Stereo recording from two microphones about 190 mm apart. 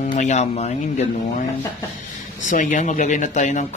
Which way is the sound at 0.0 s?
40° left (ahead or behind).